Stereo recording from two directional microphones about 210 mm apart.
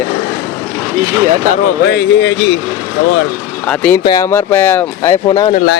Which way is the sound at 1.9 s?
55° left (ahead or behind).